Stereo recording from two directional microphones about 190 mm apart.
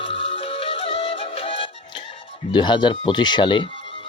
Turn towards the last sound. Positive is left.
turn(degrees=25)  # may be behind; listen again after turning